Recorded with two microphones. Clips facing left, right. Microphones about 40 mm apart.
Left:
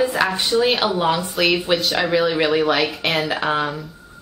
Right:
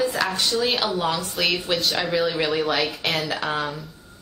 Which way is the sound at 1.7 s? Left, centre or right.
Centre.